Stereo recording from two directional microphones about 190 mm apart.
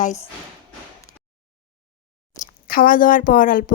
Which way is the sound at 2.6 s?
50° left (ahead or behind).